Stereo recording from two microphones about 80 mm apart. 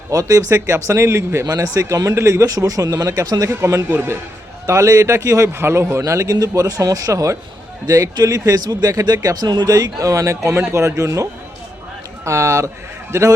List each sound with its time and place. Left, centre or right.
0.1 s a man's voice: right